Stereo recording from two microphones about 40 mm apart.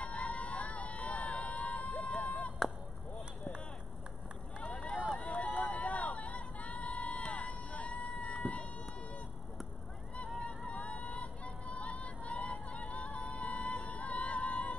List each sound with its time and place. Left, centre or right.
0.0 s vehicle: left
2.2 s chop: left
4.6 s run: left
5.1 s vehicle: left
10.7 s vehicle: left
11.1 s music: left